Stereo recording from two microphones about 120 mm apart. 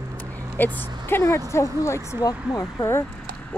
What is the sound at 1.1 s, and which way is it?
Speech, 20° left (ahead or behind).